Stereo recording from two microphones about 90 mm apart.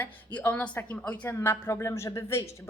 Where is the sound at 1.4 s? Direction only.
30° left (ahead or behind).